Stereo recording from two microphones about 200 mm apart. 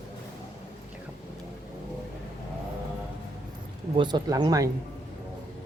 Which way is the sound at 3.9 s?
20° right (ahead or behind).